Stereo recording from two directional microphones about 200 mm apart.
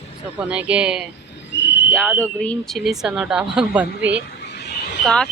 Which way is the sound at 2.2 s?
5° left (ahead or behind).